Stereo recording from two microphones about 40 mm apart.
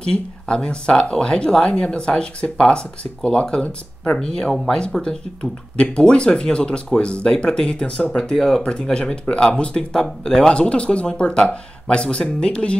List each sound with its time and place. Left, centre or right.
0.1 s speech: left
10.2 s speech: centre